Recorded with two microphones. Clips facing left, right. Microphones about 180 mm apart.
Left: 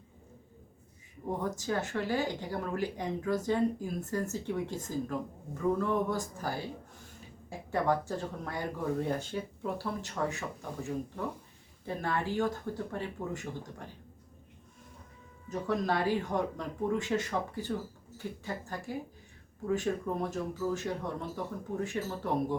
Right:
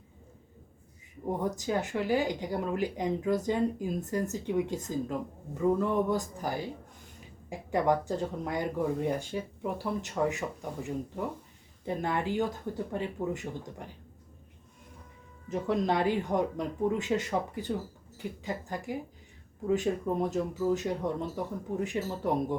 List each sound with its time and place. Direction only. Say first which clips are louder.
1.4 s speech: right 2 dB; 15° right (ahead or behind)
7.7 s speech: right 3 dB; 15° right (ahead or behind)
15.4 s speech: right 3 dB; 20° right (ahead or behind)